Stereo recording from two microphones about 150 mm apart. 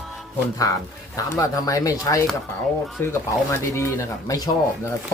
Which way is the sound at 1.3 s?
25° left (ahead or behind).